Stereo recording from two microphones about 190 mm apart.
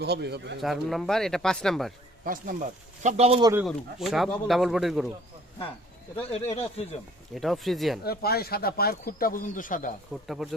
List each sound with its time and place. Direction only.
0.0 s speech: 60° right (ahead or behind)
0.6 s speech: centre (ahead or behind)
2.2 s speech: 45° right (ahead or behind)
3.4 s speech: 10° right (ahead or behind)
3.7 s speech: centre (ahead or behind)
6.1 s speech: 30° left (ahead or behind)
7.3 s speech: centre (ahead or behind)
8.0 s speech: 55° left (ahead or behind)
10.2 s speech: centre (ahead or behind)